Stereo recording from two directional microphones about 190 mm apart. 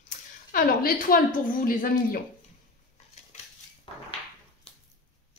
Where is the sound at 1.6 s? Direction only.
50° left (ahead or behind).